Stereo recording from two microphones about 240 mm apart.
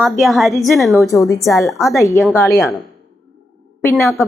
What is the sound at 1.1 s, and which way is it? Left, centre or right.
Speech, centre.